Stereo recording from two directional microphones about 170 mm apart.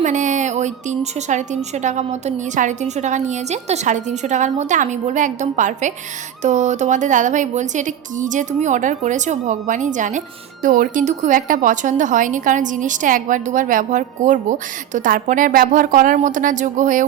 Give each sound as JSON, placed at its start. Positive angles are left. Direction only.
{"t": 0.0, "sound": "a woman's voice", "side_deg": -45}